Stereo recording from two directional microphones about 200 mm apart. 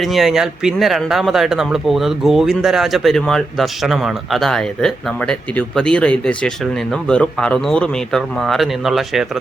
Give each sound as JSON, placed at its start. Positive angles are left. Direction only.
{"t": 0.0, "sound": "speech", "side_deg": 0}